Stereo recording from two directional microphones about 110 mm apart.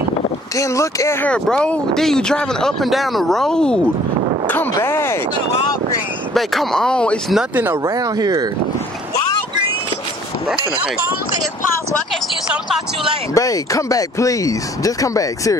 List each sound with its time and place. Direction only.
0.6 s speech: 30° left (ahead or behind)
1.2 s speech: 10° left (ahead or behind)
4.7 s speech: 20° left (ahead or behind)
6.3 s speech: centre (ahead or behind)
7.8 s speech: 35° right (ahead or behind)
12.4 s speech: 5° right (ahead or behind)
13.3 s speech: 30° left (ahead or behind)